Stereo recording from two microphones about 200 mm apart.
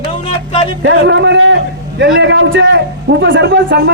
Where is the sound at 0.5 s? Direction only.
25° left (ahead or behind).